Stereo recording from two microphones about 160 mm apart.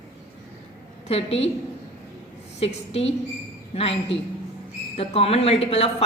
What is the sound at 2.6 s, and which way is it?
A woman's voice, 40° left (ahead or behind).